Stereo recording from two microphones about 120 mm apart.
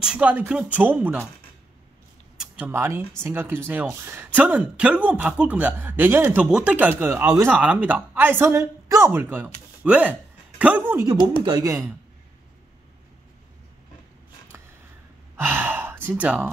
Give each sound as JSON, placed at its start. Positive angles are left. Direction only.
{"t": 0.0, "sound": "speech", "side_deg": -10}
{"t": 2.3, "sound": "speech", "side_deg": -10}
{"t": 11.4, "sound": "speech", "side_deg": -30}
{"t": 15.3, "sound": "sigh", "side_deg": -15}